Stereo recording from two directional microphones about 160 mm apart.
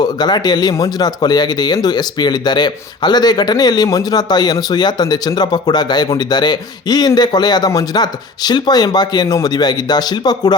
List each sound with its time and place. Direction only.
0.0 s speech: 25° left (ahead or behind)